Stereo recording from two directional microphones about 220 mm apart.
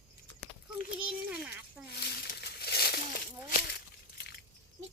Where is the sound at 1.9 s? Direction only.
50° left (ahead or behind).